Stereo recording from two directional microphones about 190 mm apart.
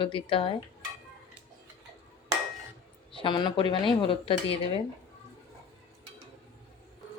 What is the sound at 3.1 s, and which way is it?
Speech, 25° left (ahead or behind).